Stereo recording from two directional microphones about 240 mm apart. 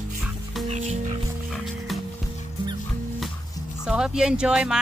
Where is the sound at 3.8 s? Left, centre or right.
Centre.